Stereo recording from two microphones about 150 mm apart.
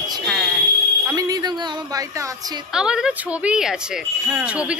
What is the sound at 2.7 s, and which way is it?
Speech, 5° right (ahead or behind).